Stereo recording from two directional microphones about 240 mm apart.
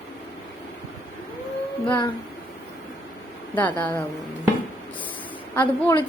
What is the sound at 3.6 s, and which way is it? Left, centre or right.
Speech, centre.